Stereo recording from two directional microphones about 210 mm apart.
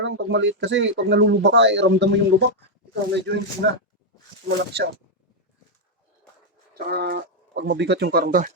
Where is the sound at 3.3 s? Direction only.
55° right (ahead or behind).